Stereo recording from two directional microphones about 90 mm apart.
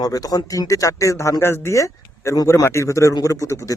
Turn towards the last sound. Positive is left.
turn(degrees=35)  # may be behind; listen again after turning